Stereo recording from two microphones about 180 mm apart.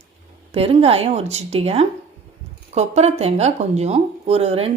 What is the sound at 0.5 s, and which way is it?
Speech, 35° right (ahead or behind).